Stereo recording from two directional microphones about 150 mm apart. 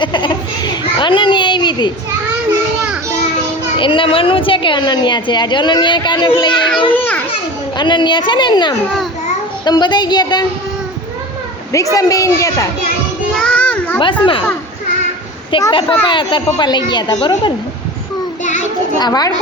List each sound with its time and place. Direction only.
0.0 s children playing: 30° left (ahead or behind)
3.8 s a woman's voice: 35° left (ahead or behind)
6.9 s children playing: 10° left (ahead or behind)
7.8 s a woman's voice: 30° left (ahead or behind)
11.9 s speech: 20° left (ahead or behind)
13.3 s child singing: 5° left (ahead or behind)
14.0 s a woman's voice: 35° left (ahead or behind)
15.5 s a woman's voice: 35° left (ahead or behind)
18.9 s speech: 25° left (ahead or behind)